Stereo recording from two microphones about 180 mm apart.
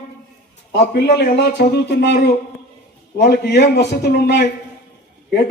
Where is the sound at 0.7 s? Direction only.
65° left (ahead or behind).